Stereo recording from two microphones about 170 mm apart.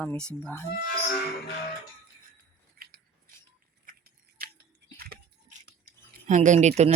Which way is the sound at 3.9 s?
60° right (ahead or behind).